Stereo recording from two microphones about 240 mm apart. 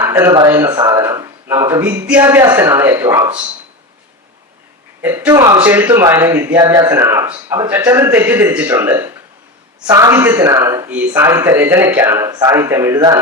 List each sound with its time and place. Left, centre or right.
0.0 s speech: centre
5.0 s speech: centre